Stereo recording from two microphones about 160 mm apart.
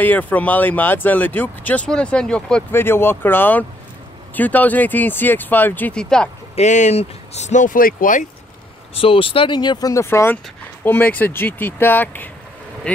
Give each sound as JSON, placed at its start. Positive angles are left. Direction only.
{"t": 0.0, "sound": "speech", "side_deg": 10}
{"t": 6.5, "sound": "speech", "side_deg": 45}
{"t": 8.9, "sound": "speech", "side_deg": 35}